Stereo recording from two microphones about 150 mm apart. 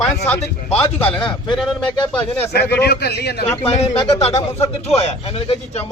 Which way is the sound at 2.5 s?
90° left.